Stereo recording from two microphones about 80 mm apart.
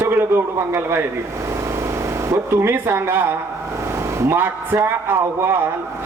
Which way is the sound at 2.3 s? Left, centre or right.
Right.